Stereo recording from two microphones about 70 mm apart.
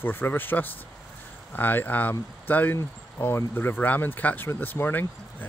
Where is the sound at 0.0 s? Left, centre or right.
Left.